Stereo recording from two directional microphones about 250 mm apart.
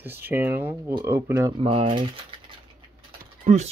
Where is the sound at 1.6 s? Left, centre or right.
Right.